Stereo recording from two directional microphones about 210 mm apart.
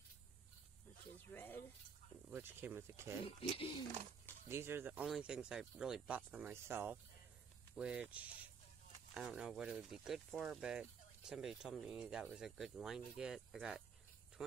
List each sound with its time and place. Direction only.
1.3 s speech: 10° left (ahead or behind)
2.3 s speech: 10° right (ahead or behind)
3.3 s speech: 25° left (ahead or behind)
4.5 s speech: 10° right (ahead or behind)